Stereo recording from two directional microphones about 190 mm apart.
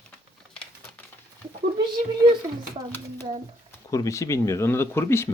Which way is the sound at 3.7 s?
15° left (ahead or behind).